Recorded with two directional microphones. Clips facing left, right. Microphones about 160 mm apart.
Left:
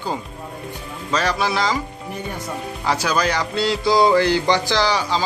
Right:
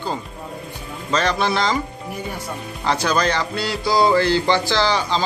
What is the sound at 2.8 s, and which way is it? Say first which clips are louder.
Speech: right 1 dB; 5° left (ahead or behind).